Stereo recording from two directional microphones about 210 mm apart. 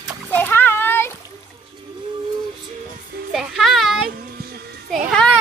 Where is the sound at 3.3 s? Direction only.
Centre (ahead or behind).